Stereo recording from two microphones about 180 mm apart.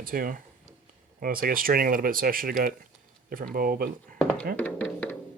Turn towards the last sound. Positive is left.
turn(degrees=10)  # may be behind; listen again after turning